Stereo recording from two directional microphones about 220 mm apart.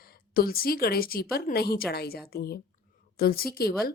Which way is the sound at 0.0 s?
45° left (ahead or behind).